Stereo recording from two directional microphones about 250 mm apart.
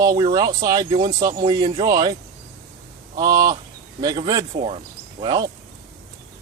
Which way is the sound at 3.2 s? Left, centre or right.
Centre.